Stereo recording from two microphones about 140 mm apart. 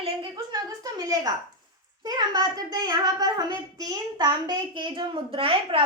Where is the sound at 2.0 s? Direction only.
30° right (ahead or behind).